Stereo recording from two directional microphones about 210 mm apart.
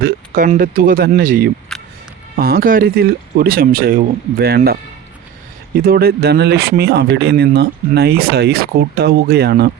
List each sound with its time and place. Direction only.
0.0 s speech: 40° right (ahead or behind)